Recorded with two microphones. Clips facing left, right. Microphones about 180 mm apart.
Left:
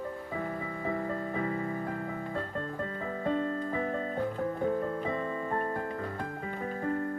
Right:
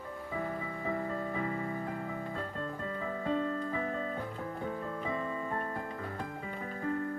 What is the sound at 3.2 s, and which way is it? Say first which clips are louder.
Music: left 3 dB; 50° left (ahead or behind).